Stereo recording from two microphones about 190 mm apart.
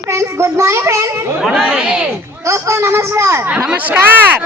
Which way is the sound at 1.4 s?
5° right (ahead or behind).